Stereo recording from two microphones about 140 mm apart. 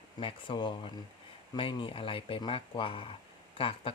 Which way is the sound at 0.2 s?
40° left (ahead or behind).